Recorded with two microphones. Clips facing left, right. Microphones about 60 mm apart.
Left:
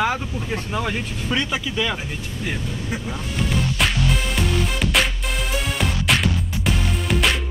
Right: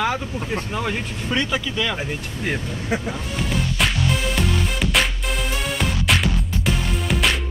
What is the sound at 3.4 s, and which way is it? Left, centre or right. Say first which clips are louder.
Music: left 1 dB; centre.